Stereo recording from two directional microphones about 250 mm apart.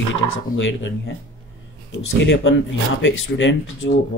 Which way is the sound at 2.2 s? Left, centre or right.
Left.